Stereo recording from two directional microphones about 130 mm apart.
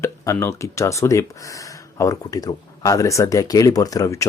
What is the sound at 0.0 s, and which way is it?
Speech, 20° left (ahead or behind).